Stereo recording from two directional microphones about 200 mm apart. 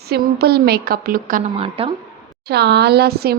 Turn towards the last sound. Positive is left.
turn(degrees=-55)  # may be behind; listen again after turning